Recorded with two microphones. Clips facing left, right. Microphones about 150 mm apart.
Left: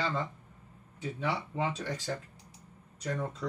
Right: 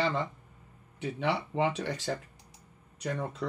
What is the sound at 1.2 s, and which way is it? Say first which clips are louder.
Speech: right 4 dB; 75° right (ahead or behind).